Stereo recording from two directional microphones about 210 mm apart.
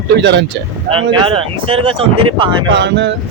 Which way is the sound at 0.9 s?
25° right (ahead or behind).